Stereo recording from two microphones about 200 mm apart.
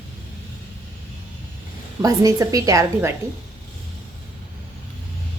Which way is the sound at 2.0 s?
20° right (ahead or behind).